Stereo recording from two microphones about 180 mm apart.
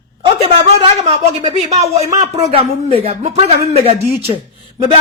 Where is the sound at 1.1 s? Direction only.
35° right (ahead or behind).